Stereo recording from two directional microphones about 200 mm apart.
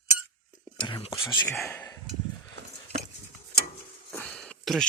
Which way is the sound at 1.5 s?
10° left (ahead or behind).